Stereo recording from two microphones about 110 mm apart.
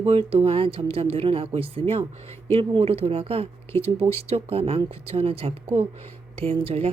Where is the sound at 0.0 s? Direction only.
60° right (ahead or behind).